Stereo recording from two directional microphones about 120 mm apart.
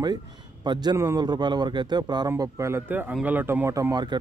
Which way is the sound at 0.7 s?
35° right (ahead or behind).